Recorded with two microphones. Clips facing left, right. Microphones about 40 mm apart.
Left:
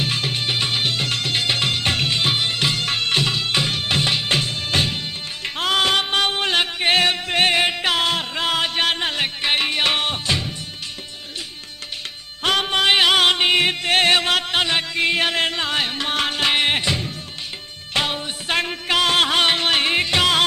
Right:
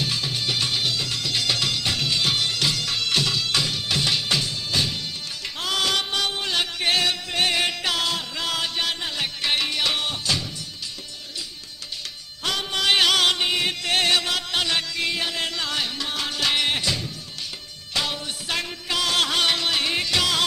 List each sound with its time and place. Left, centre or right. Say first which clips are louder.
0.0 s music: left 3 dB; left
9.4 s music: left 3 dB; left
12.4 s music: left 6 dB; left
15.2 s music: left 6 dB; left